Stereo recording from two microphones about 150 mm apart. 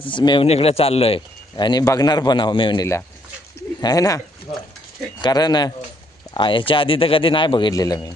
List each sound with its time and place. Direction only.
0.0 s a man's voice: 30° left (ahead or behind)
0.4 s a man's voice: 45° left (ahead or behind)
1.5 s a man's voice: 30° left (ahead or behind)
5.2 s a man's voice: 25° left (ahead or behind)